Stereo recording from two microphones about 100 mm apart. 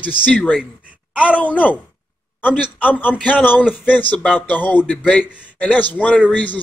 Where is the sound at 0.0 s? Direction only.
15° left (ahead or behind).